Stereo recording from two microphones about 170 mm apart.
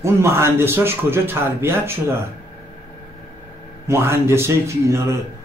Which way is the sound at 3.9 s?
15° right (ahead or behind).